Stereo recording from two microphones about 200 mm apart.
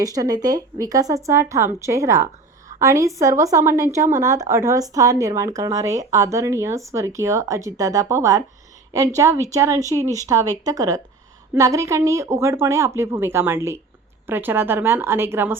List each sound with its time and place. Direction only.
0.0 s speech: 20° right (ahead or behind)